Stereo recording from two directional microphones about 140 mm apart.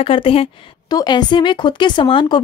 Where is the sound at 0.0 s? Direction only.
40° left (ahead or behind).